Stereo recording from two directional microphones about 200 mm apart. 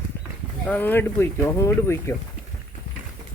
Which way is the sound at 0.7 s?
10° left (ahead or behind).